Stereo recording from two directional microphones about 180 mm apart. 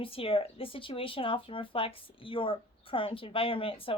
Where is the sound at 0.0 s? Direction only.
30° left (ahead or behind).